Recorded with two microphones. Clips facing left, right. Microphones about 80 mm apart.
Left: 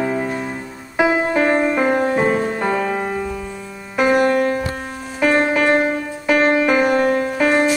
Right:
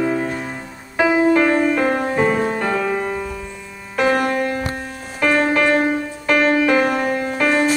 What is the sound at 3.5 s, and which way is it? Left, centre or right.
Music, left.